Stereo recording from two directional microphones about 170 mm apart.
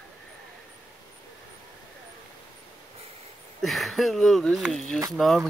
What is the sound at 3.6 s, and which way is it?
Speech, centre (ahead or behind).